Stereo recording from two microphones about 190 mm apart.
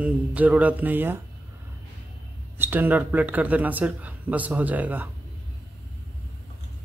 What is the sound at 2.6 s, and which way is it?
Speech, 10° right (ahead or behind).